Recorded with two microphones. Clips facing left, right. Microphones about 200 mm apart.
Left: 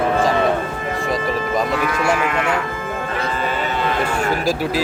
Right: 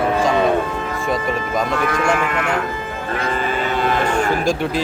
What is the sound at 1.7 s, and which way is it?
Speech, 45° right (ahead or behind).